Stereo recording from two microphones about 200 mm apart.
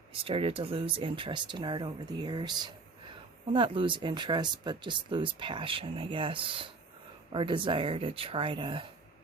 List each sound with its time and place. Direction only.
0.1 s speech: 25° right (ahead or behind)